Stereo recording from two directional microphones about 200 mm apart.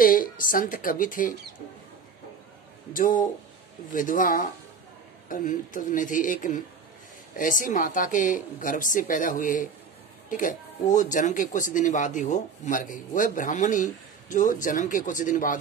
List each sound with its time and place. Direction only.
0.0 s speech: 45° left (ahead or behind)
2.9 s speech: 45° left (ahead or behind)